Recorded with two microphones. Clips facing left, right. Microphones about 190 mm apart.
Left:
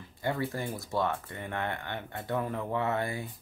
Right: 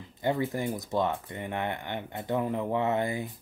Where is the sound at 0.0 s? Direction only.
20° right (ahead or behind).